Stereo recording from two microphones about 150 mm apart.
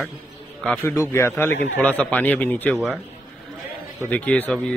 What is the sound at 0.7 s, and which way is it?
Speech, 15° left (ahead or behind).